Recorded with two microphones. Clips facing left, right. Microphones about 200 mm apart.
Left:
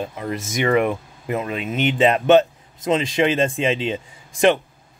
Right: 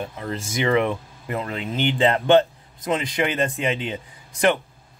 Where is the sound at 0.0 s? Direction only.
15° left (ahead or behind).